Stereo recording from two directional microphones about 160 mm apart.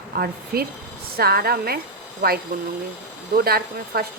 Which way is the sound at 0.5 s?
75° right (ahead or behind).